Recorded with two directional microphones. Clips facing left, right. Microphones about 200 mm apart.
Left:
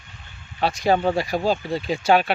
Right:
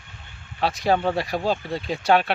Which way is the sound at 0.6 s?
Centre (ahead or behind).